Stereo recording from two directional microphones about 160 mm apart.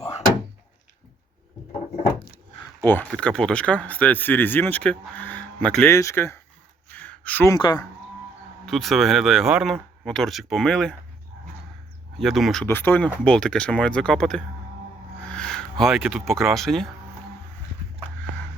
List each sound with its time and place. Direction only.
2.8 s speech: 10° left (ahead or behind)
6.9 s a sound: 10° left (ahead or behind)
7.5 s speech: 25° left (ahead or behind)
8.6 s speech: centre (ahead or behind)
12.2 s speech: centre (ahead or behind)
12.6 s speech: 10° left (ahead or behind)
15.3 s a sound: 5° left (ahead or behind)
15.8 s speech: centre (ahead or behind)